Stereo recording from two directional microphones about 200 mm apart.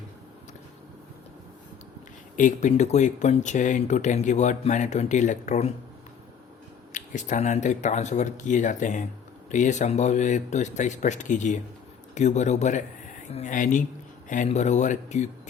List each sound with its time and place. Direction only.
2.3 s speech: 40° left (ahead or behind)
6.9 s speech: 40° left (ahead or behind)